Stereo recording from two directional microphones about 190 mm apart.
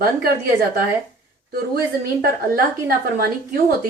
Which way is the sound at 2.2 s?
50° right (ahead or behind).